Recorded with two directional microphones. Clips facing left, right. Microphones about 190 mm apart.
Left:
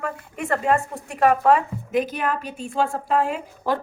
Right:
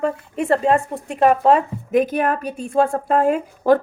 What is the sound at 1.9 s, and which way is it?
A woman's voice, 50° right (ahead or behind).